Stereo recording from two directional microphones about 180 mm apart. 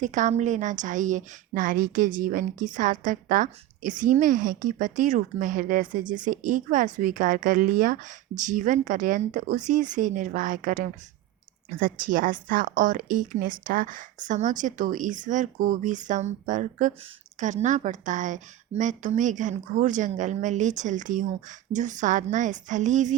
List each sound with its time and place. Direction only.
0.0 s a woman's voice: 45° right (ahead or behind)